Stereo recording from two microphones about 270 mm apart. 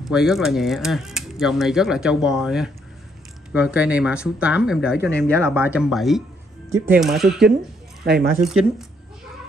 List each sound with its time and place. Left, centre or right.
0.0 s speech: centre
8.0 s speech: right
8.5 s speech: centre